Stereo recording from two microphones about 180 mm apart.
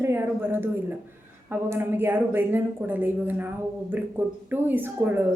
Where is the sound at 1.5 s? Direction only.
10° right (ahead or behind).